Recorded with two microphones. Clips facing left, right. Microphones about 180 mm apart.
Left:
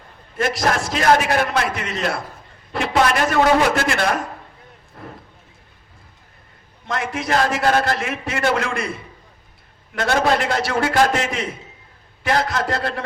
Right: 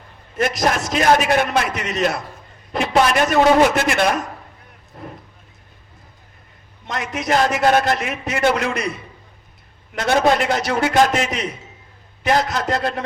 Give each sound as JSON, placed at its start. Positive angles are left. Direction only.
{"t": 0.3, "sound": "a man's voice", "side_deg": -20}
{"t": 5.0, "sound": "a sound", "side_deg": -20}
{"t": 6.8, "sound": "a man's voice", "side_deg": -20}
{"t": 9.9, "sound": "a man's voice", "side_deg": -20}